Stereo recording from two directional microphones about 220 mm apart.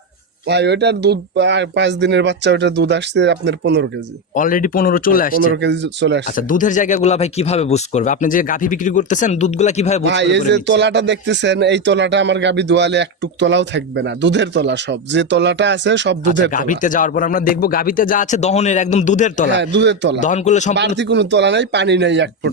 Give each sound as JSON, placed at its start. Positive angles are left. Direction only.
{"t": 0.4, "sound": "speech", "side_deg": -50}
{"t": 4.4, "sound": "speech", "side_deg": 40}
{"t": 5.5, "sound": "speech", "side_deg": -50}
{"t": 6.2, "sound": "speech", "side_deg": 35}
{"t": 10.0, "sound": "speech", "side_deg": -55}
{"t": 16.5, "sound": "speech", "side_deg": 35}
{"t": 19.5, "sound": "speech", "side_deg": -55}
{"t": 20.2, "sound": "speech", "side_deg": 35}
{"t": 20.7, "sound": "speech", "side_deg": -50}